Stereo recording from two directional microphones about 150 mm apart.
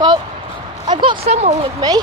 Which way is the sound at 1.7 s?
25° right (ahead or behind).